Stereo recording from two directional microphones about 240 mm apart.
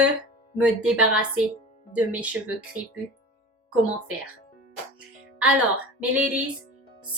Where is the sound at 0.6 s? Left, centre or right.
Centre.